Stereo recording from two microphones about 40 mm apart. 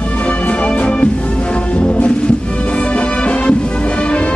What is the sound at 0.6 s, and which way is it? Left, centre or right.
Music, left.